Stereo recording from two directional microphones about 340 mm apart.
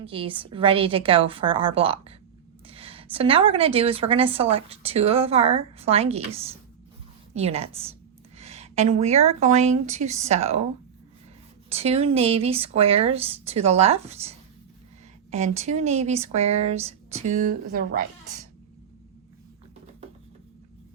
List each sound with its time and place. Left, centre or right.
0.0 s a woman's voice: centre
8.4 s a sound: centre
9.4 s speech: centre
11.7 s a woman's voice: centre